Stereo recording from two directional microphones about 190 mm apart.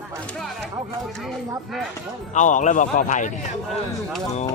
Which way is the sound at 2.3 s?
40° left (ahead or behind).